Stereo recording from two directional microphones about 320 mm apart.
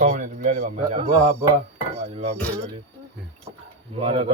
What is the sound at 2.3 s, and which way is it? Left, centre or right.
Speech, centre.